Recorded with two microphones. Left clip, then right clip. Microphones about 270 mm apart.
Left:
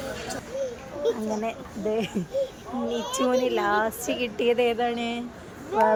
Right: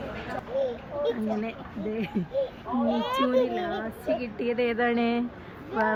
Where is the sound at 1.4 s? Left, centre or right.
Centre.